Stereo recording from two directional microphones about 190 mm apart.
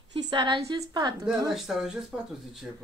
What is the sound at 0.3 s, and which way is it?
Speech, 25° right (ahead or behind).